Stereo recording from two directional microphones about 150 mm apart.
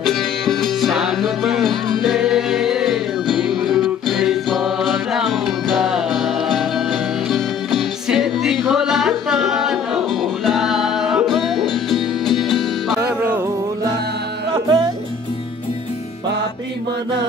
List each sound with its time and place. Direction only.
0.0 s music: centre (ahead or behind)
14.5 s music: 25° right (ahead or behind)